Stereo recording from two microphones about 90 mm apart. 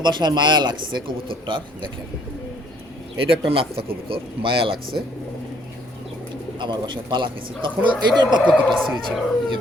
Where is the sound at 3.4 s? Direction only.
85° right.